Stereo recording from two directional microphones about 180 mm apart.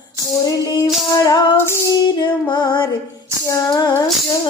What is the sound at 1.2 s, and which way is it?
Female singing, 15° left (ahead or behind).